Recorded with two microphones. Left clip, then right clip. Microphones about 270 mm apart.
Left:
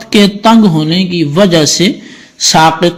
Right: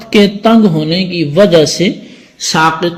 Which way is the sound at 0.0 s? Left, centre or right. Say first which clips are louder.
Left 1 dB; left.